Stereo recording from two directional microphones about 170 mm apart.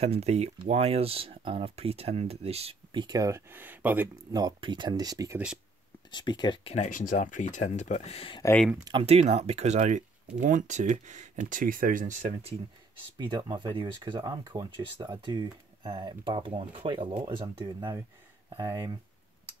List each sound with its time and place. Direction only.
0.0 s speech: 40° right (ahead or behind); by 4.1 s 10° right (ahead or behind)
4.3 s speech: 25° right (ahead or behind)
6.1 s speech: 25° left (ahead or behind)
8.7 s speech: 25° right (ahead or behind)
9.0 s speech: 35° right (ahead or behind)
13.2 s speech: 25° right (ahead or behind)
18.6 s speech: 15° right (ahead or behind)